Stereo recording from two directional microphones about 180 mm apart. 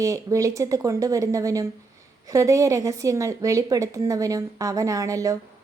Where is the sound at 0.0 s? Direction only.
20° right (ahead or behind).